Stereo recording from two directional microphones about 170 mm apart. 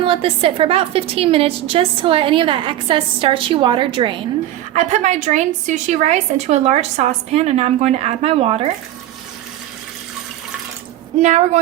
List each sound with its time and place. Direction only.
0.0 s a woman's voice: 35° right (ahead or behind)
4.7 s a woman's voice: 45° right (ahead or behind)
11.2 s a woman's voice: 45° right (ahead or behind)